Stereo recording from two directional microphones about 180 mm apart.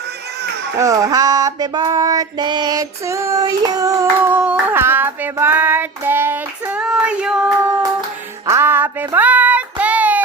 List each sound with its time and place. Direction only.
0.8 s female singing: 20° right (ahead or behind)
4.4 s child singing: 5° right (ahead or behind)